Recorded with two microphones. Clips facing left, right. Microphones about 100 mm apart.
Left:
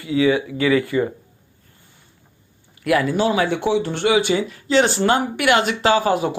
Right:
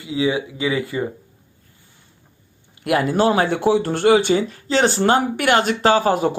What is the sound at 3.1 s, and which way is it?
Speech, 40° right (ahead or behind).